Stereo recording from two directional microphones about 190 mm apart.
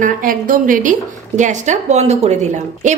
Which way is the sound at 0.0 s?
45° right (ahead or behind).